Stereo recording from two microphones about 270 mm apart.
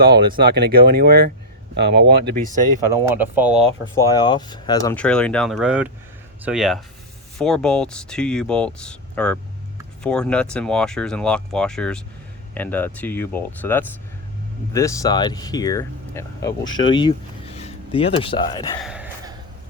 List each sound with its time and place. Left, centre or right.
0.0 s speech: right
2.9 s speech: centre
3.9 s speech: centre
16.5 s speech: left
16.9 s speech: centre
18.8 s a sound: centre